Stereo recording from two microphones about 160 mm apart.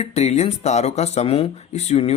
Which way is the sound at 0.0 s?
40° left (ahead or behind).